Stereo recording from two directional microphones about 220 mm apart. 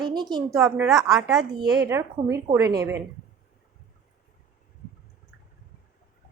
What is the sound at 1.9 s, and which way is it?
A woman's voice, 15° right (ahead or behind).